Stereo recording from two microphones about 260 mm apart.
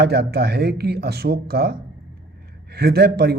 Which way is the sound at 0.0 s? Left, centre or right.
Right.